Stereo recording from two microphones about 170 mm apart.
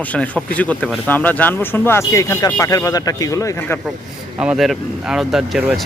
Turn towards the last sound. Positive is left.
turn(degrees=0)  # may be behind; listen again after turning